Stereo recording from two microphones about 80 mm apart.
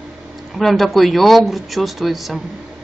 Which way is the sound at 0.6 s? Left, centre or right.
Centre.